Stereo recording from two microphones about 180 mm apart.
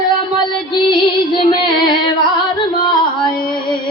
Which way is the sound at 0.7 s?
30° left (ahead or behind).